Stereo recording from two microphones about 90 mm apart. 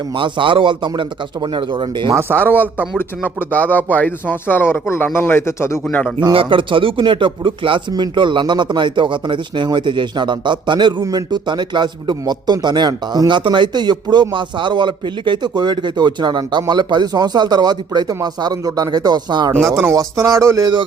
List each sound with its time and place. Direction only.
0.2 s a man's voice: 70° right (ahead or behind)
2.5 s speech: 20° right (ahead or behind)
3.0 s speech: 20° left (ahead or behind)
5.9 s speech: 15° left (ahead or behind)
6.3 s a man's voice: 75° right (ahead or behind); by 19.5 s 55° right (ahead or behind)
19.5 s speech: 5° left (ahead or behind)
19.9 s speech: 35° right (ahead or behind)